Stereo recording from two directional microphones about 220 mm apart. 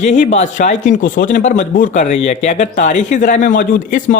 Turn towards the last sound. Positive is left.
turn(degrees=35)  # may be behind; listen again after turning